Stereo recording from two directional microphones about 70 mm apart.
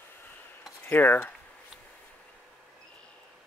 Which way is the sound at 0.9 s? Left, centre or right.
Left.